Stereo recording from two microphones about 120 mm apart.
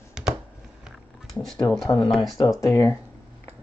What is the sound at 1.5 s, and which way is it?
Speech, 30° left (ahead or behind).